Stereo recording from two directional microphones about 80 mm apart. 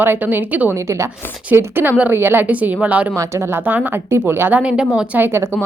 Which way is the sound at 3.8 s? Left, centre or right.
Right.